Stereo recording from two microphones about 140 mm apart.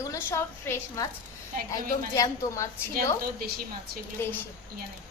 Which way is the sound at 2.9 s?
90° right.